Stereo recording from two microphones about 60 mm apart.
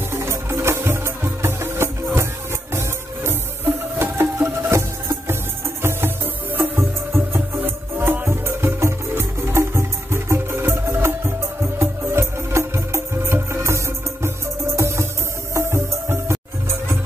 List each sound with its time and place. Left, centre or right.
0.1 s music: right